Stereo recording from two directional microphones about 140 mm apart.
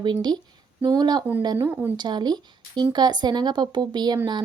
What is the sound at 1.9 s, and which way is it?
Speech, 30° right (ahead or behind).